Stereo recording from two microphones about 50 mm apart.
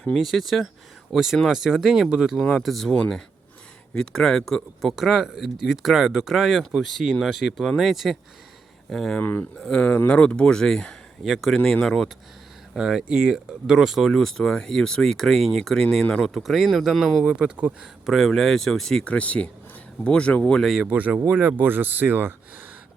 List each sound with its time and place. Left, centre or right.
0.2 s speech: centre
2.4 s speech: centre
3.9 s speech: centre
4.9 s speech: centre
8.9 s speech: centre
11.2 s speech: centre
12.7 s speech: centre
14.1 s speech: centre
16.2 s speech: centre
17.2 s speech: right
18.0 s speech: centre
19.0 s speech: left
20.8 s speech: right
21.2 s speech: right